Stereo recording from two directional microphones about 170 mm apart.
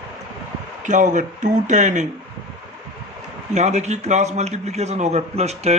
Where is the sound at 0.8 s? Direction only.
45° right (ahead or behind).